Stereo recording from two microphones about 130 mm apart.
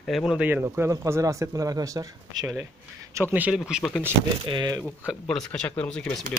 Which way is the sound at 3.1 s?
15° right (ahead or behind).